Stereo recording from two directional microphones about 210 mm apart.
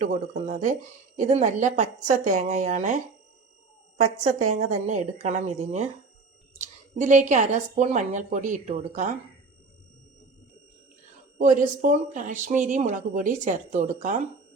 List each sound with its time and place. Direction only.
0.0 s speech: 35° right (ahead or behind)
4.0 s speech: 35° right (ahead or behind)
11.3 s speech: 40° right (ahead or behind)